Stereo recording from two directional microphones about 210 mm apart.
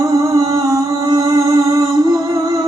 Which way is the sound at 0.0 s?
15° right (ahead or behind).